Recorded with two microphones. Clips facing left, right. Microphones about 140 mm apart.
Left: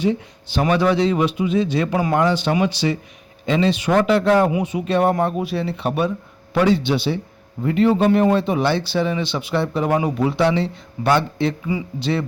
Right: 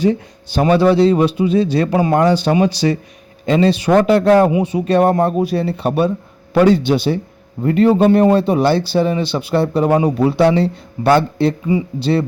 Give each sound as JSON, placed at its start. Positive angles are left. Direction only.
{"t": 0.0, "sound": "speech", "side_deg": -40}